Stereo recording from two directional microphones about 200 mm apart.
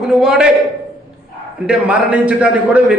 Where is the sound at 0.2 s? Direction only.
5° right (ahead or behind).